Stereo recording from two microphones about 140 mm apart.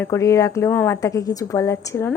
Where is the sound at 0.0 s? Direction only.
20° left (ahead or behind).